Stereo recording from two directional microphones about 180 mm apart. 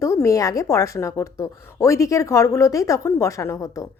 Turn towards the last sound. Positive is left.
turn(degrees=15)  # may be behind; listen again after turning